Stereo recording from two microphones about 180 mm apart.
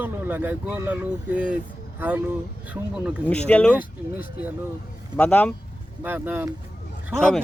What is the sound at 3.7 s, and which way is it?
Speech, 10° right (ahead or behind).